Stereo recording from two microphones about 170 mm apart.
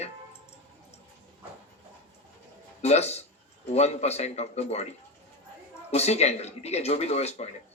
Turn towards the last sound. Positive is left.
turn(degrees=40)  # may be behind; listen again after turning